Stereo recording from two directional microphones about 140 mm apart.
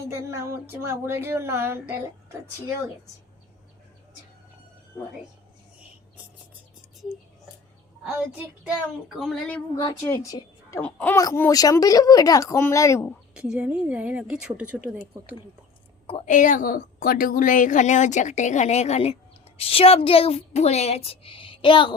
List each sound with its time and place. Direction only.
0.1 s speech: 20° right (ahead or behind)
8.0 s speech: 10° right (ahead or behind)
10.1 s a woman's voice: 25° left (ahead or behind)
10.8 s speech: 10° left (ahead or behind)
11.3 s speech: 25° left (ahead or behind)
13.3 s speech: 5° right (ahead or behind)
16.2 s a woman's voice: 65° left (ahead or behind); by 21.9 s 35° left (ahead or behind)